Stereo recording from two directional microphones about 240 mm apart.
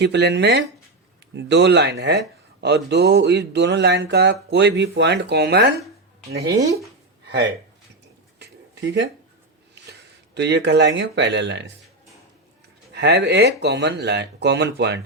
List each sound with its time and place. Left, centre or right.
0.0 s speech: right
7.3 s speech: right
8.4 s a sound: right
10.3 s speech: right
12.9 s speech: right